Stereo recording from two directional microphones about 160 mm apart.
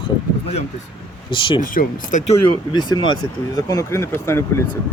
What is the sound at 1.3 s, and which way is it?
Speech, 30° left (ahead or behind).